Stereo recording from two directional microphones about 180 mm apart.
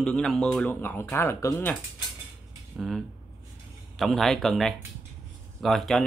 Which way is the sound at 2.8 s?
Centre (ahead or behind).